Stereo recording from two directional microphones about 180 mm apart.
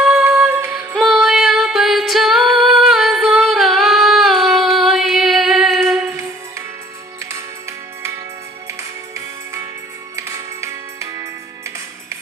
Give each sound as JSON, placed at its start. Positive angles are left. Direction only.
{"t": 0.0, "sound": "music", "side_deg": -5}
{"t": 0.9, "sound": "music", "side_deg": 0}
{"t": 10.2, "sound": "music", "side_deg": -15}